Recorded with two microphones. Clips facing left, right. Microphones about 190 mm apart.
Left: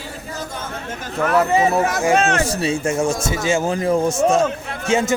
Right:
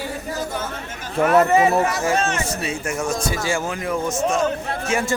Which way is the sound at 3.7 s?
30° left (ahead or behind).